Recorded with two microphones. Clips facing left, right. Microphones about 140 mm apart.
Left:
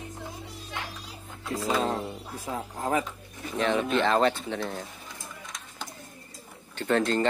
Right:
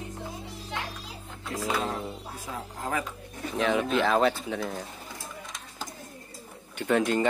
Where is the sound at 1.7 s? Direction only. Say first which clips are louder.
Left 3 dB; 35° left (ahead or behind).